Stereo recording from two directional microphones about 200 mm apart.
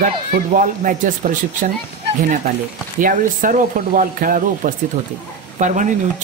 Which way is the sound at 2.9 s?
40° right (ahead or behind).